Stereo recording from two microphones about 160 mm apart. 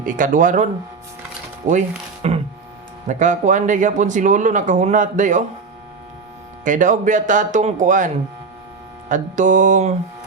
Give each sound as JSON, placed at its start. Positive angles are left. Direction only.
{"t": 0.0, "sound": "speech", "side_deg": -55}
{"t": 2.2, "sound": "a sound", "side_deg": -40}
{"t": 3.1, "sound": "speech", "side_deg": -50}
{"t": 6.7, "sound": "speech", "side_deg": -50}